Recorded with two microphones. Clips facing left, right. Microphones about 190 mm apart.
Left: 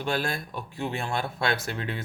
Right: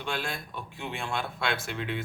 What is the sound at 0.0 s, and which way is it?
A man's voice, 40° left (ahead or behind).